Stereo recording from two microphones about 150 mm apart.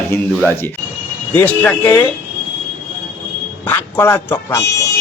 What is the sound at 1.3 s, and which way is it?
Speech, 10° left (ahead or behind).